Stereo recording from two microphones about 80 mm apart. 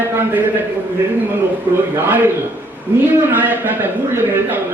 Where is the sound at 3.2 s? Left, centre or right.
Right.